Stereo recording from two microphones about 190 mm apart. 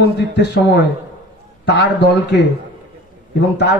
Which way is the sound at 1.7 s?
65° left (ahead or behind).